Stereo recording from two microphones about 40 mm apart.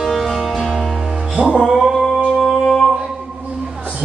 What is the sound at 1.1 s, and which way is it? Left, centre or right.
Music, centre.